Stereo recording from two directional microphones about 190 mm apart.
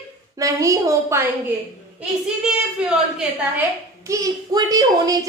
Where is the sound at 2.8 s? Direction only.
Centre (ahead or behind).